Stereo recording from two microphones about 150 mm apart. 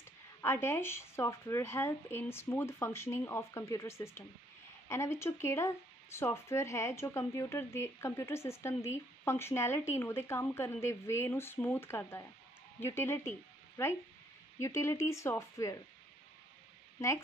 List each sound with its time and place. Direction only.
0.4 s speech: 15° left (ahead or behind)